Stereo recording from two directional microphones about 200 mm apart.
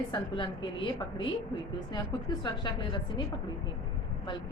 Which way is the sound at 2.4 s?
25° left (ahead or behind).